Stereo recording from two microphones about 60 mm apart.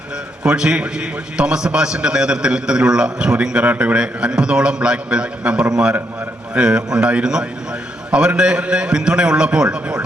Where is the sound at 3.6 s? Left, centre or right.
Right.